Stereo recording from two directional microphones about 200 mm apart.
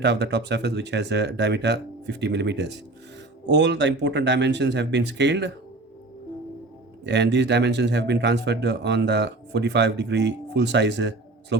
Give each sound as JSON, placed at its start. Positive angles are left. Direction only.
{"t": 0.0, "sound": "speech", "side_deg": -60}
{"t": 7.0, "sound": "speech", "side_deg": -60}